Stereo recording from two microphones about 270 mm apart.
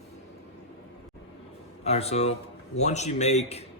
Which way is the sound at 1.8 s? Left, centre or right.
Left.